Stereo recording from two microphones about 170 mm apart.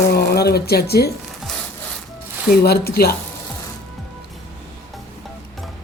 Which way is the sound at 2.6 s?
65° left (ahead or behind).